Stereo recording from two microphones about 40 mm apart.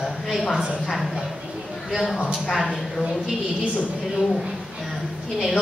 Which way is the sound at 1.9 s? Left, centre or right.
Centre.